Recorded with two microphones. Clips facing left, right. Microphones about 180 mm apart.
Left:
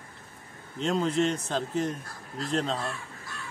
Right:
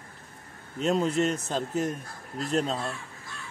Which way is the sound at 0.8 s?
5° right (ahead or behind).